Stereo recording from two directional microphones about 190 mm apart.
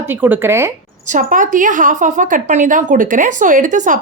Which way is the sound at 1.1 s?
45° right (ahead or behind).